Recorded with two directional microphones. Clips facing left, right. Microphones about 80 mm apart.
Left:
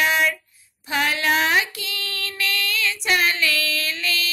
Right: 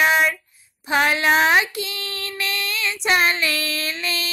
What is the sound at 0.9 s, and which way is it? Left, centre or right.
Child singing, right.